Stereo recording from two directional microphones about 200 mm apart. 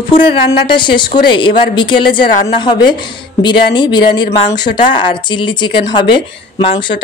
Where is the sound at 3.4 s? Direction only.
25° left (ahead or behind).